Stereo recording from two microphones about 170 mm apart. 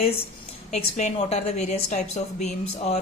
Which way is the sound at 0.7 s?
40° left (ahead or behind).